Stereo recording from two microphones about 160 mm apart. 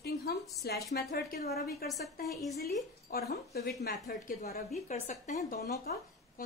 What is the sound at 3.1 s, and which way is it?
Speech, 85° left.